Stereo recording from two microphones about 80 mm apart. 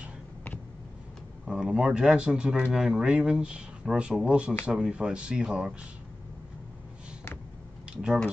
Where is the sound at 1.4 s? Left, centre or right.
Centre.